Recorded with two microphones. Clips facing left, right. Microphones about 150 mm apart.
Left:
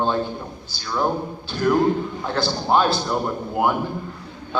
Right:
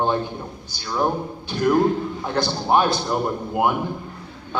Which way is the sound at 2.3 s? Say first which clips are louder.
Even; 15° right (ahead or behind).